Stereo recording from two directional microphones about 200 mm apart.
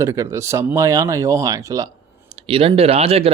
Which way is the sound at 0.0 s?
15° right (ahead or behind).